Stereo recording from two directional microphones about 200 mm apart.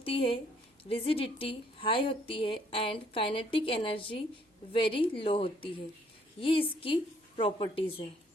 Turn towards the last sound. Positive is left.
turn(degrees=25)  # may be behind; listen again after turning